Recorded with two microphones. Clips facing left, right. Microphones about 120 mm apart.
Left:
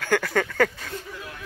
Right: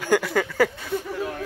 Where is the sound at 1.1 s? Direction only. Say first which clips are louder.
Right 10 dB; 45° right (ahead or behind).